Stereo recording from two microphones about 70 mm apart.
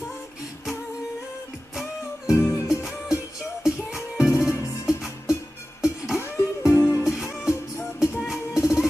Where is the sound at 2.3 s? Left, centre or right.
Left.